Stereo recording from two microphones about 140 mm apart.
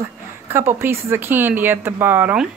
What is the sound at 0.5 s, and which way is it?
Speech, 15° right (ahead or behind).